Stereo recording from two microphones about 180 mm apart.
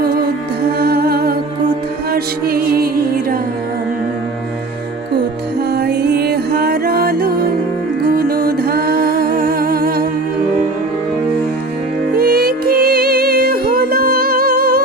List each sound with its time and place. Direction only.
0.8 s humming: 60° right (ahead or behind)
2.1 s music: 55° right (ahead or behind)
5.7 s music: 60° right (ahead or behind)
12.1 s music: 60° right (ahead or behind)